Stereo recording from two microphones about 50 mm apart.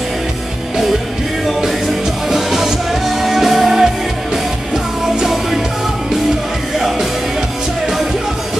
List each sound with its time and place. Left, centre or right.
2.2 s music: centre
5.2 s music: centre